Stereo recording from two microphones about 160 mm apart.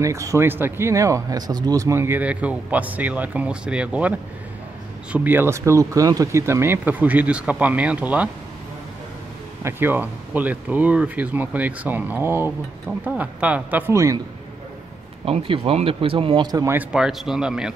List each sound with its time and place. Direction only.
0.0 s speech: 20° right (ahead or behind)
5.1 s speech: 10° right (ahead or behind)
9.6 s speech: 15° right (ahead or behind)
15.2 s speech: 35° right (ahead or behind)
16.7 s speech: 5° right (ahead or behind)